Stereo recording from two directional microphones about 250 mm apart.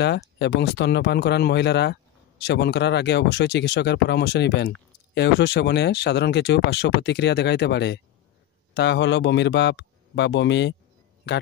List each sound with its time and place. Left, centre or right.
0.0 s speech: left